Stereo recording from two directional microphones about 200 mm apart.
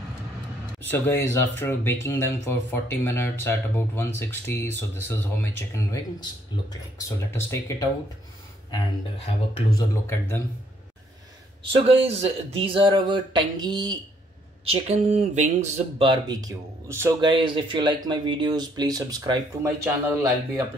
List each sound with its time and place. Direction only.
0.8 s speech: 10° left (ahead or behind)
9.8 s speech: 10° left (ahead or behind)
11.7 s speech: 30° right (ahead or behind)
16.1 s speech: 20° right (ahead or behind)
17.2 s speech: 25° right (ahead or behind)